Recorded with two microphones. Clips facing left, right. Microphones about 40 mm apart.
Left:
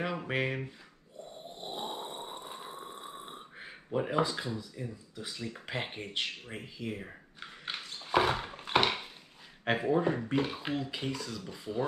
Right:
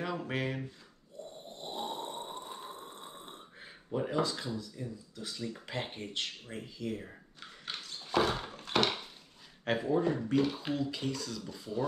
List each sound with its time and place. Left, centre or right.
0.0 s speech: centre
1.5 s snoring: centre
5.1 s speech: left